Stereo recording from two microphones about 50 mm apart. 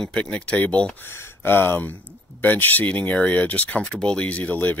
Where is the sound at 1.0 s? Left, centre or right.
Left.